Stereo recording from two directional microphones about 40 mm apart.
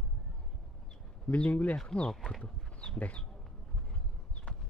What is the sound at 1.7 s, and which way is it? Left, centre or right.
Speech, left.